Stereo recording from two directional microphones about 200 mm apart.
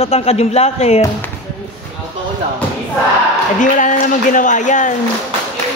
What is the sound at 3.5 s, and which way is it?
A man's voice, 40° left (ahead or behind).